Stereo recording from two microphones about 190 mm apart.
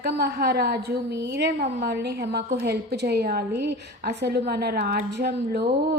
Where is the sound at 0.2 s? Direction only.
60° right (ahead or behind).